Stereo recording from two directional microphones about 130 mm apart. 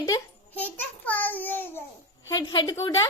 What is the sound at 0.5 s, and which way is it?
A child's voice, 10° left (ahead or behind).